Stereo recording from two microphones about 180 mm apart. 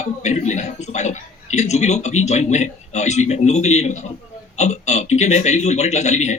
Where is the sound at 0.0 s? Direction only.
40° left (ahead or behind).